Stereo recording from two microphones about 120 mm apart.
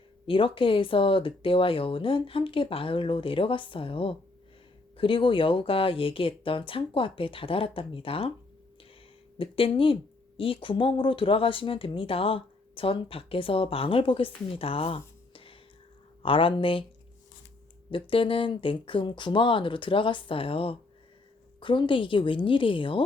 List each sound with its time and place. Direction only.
0.3 s a woman's voice: 50° left (ahead or behind)
9.4 s a woman's voice: 50° left (ahead or behind)
18.1 s a woman's voice: 45° left (ahead or behind)